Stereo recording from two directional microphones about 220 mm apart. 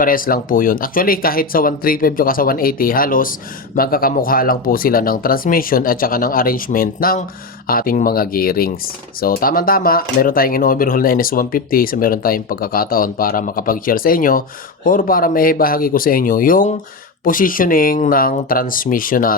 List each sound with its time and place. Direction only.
0.0 s speech: 40° left (ahead or behind)